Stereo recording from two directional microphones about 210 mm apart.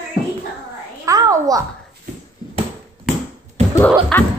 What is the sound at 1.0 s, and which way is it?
Speech, 15° right (ahead or behind).